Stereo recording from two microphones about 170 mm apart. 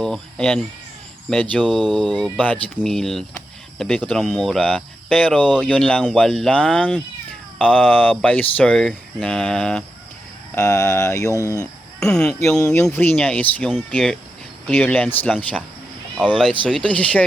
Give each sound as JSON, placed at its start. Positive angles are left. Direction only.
{"t": 0.0, "sound": "speech", "side_deg": 5}
{"t": 10.5, "sound": "speech", "side_deg": 15}
{"t": 11.9, "sound": "speech", "side_deg": 5}
{"t": 16.1, "sound": "speech", "side_deg": -5}
{"t": 16.6, "sound": "speech", "side_deg": 5}